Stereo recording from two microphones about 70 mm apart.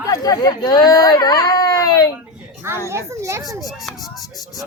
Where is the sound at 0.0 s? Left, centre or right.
Left.